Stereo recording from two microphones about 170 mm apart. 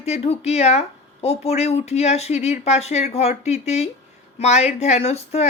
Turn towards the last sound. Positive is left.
turn(degrees=40)  # may be behind; listen again after turning